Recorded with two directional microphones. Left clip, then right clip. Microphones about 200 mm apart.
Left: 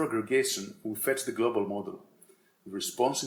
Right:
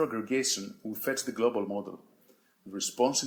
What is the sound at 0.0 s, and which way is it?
Speech, 40° right (ahead or behind).